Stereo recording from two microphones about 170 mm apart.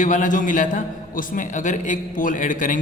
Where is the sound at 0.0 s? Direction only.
50° left (ahead or behind).